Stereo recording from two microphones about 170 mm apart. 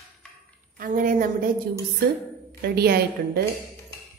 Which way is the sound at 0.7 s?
50° right (ahead or behind).